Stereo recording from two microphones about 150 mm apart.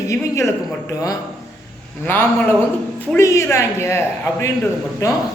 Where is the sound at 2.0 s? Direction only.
15° left (ahead or behind).